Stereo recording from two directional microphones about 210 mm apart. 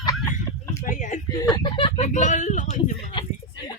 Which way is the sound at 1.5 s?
25° left (ahead or behind).